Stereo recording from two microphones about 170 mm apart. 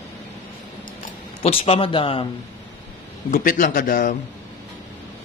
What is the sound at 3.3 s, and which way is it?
Speech, 55° left (ahead or behind).